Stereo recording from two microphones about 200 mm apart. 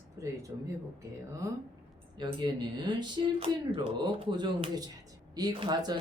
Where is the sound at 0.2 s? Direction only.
15° right (ahead or behind).